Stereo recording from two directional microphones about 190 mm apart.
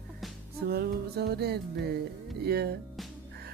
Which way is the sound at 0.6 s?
55° right (ahead or behind).